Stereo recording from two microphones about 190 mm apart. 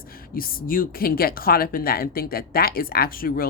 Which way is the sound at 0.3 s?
50° left (ahead or behind).